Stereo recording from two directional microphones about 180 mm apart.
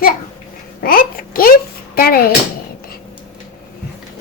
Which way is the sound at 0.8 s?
55° left (ahead or behind).